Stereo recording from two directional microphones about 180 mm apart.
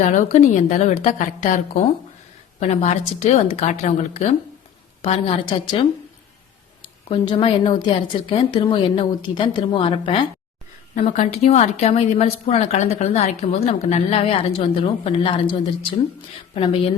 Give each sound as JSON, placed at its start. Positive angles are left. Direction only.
{"t": 0.0, "sound": "a woman's voice", "side_deg": 45}
{"t": 6.8, "sound": "a woman's voice", "side_deg": 25}
{"t": 16.6, "sound": "a woman's voice", "side_deg": 30}